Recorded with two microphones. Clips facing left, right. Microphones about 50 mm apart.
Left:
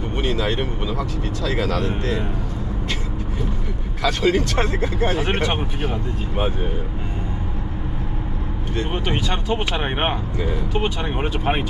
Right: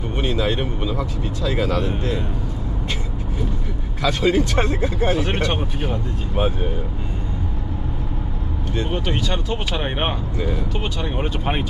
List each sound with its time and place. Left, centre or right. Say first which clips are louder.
0.2 s speech: right 1 dB; centre
4.0 s speech: right 1 dB; centre
4.6 s speech: right 1 dB; centre
5.4 s speech: even; centre
8.9 s speech: even; centre